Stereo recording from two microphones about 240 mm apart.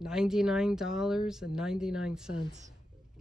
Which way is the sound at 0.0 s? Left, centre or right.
Centre.